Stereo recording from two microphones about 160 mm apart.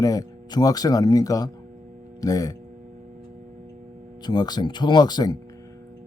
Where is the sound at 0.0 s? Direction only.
25° left (ahead or behind).